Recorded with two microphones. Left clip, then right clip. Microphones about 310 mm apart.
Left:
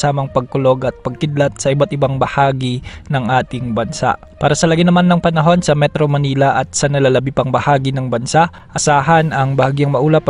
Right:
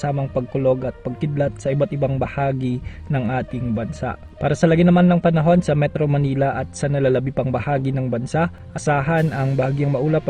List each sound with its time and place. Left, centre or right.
0.0 s speech: left